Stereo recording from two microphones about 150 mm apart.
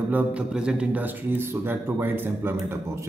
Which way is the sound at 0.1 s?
10° right (ahead or behind).